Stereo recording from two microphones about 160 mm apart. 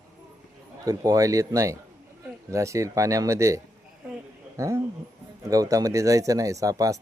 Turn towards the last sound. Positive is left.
turn(degrees=-20)  # may be behind; listen again after turning